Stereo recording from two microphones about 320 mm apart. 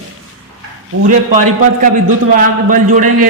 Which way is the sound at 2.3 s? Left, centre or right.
Right.